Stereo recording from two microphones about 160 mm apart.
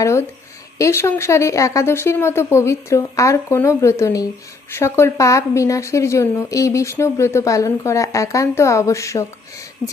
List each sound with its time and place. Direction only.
0.0 s a woman's voice: 20° left (ahead or behind)